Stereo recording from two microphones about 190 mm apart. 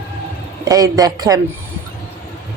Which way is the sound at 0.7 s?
20° right (ahead or behind).